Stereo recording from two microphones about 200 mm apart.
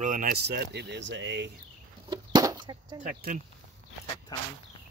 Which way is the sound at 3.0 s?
40° right (ahead or behind).